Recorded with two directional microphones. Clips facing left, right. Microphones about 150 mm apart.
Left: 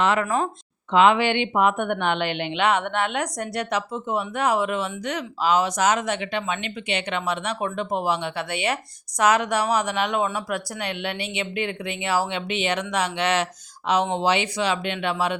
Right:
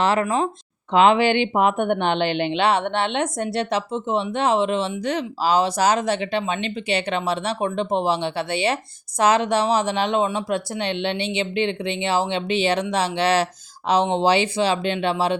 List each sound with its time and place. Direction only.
0.0 s a woman's voice: 35° right (ahead or behind)